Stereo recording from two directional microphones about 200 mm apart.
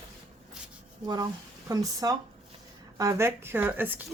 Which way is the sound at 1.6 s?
15° right (ahead or behind).